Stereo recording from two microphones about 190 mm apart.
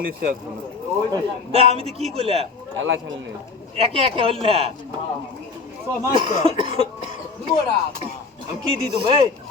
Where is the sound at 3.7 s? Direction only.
30° right (ahead or behind).